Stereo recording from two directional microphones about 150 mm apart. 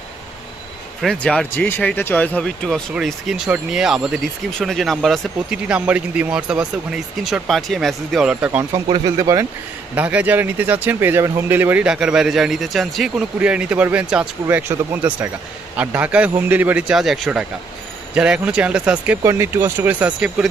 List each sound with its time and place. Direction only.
1.0 s speech: 5° left (ahead or behind); by 8.6 s 10° right (ahead or behind)
8.7 s speech: 25° right (ahead or behind)
9.9 s speech: 10° right (ahead or behind)